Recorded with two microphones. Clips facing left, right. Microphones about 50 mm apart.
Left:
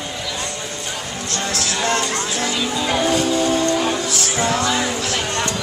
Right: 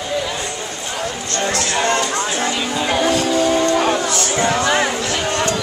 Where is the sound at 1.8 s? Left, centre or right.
Centre.